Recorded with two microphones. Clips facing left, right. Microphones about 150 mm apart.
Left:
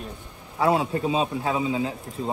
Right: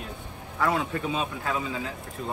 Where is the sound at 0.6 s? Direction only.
30° left (ahead or behind).